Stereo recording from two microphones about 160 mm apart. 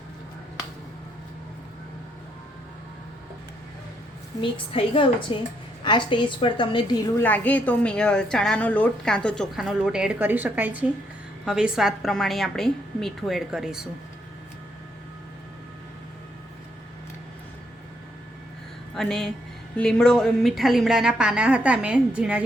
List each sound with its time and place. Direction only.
4.4 s a woman's voice: 35° left (ahead or behind)
7.2 s a woman's voice: 10° left (ahead or behind)
18.9 s a woman's voice: centre (ahead or behind)